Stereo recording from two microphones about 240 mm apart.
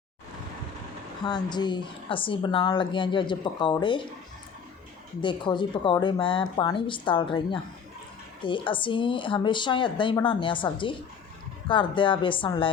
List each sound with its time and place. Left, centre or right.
1.2 s speech: centre
5.2 s speech: centre